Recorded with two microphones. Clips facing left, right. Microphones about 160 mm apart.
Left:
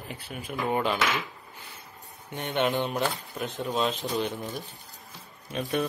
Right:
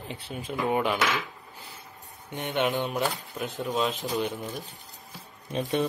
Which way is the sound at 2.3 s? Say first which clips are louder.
Even; 20° right (ahead or behind).